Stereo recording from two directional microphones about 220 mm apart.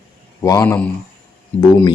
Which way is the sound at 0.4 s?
15° left (ahead or behind).